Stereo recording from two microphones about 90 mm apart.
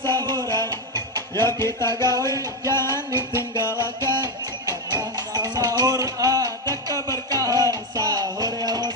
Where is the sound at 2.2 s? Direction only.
30° left (ahead or behind).